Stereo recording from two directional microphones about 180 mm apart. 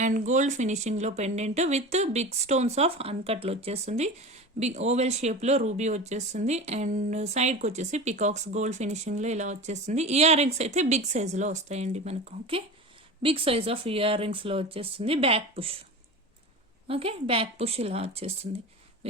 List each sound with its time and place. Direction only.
0.0 s speech: 45° right (ahead or behind)
16.8 s speech: 30° right (ahead or behind)